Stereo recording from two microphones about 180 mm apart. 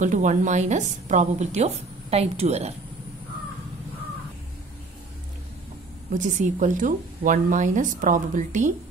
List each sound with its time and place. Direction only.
0.0 s a woman's voice: 45° right (ahead or behind)
6.1 s a woman's voice: 45° right (ahead or behind)